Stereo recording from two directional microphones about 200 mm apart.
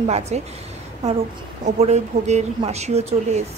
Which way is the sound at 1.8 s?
35° right (ahead or behind).